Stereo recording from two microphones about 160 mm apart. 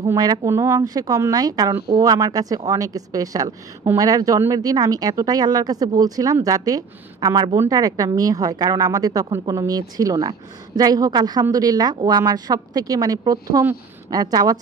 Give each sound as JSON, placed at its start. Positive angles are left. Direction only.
{"t": 0.0, "sound": "a woman's voice", "side_deg": -20}